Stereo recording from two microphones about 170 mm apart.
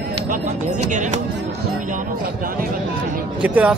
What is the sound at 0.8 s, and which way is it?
Speech, 45° right (ahead or behind).